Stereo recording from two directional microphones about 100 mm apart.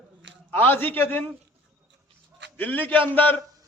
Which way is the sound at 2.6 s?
20° left (ahead or behind).